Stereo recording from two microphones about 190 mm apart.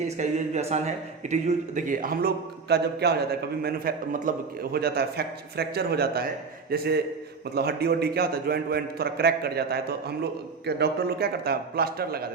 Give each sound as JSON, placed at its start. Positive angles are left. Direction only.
{"t": 0.2, "sound": "a man's voice", "side_deg": -35}